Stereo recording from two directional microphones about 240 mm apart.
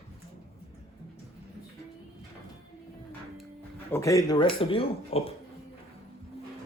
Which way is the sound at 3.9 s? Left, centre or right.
Centre.